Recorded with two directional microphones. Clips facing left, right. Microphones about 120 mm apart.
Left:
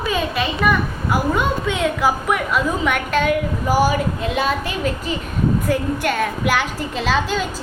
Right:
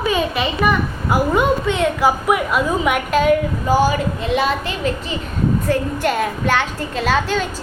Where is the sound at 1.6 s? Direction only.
Centre (ahead or behind).